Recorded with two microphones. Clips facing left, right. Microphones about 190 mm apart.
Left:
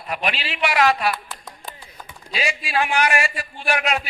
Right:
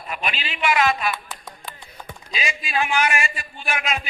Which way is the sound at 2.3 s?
65° left (ahead or behind).